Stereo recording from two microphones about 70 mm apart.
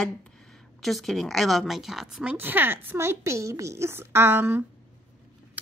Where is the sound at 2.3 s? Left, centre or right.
Right.